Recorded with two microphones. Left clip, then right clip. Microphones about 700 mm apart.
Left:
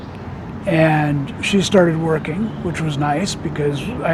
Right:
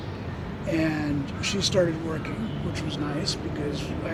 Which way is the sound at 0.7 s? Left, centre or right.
Left.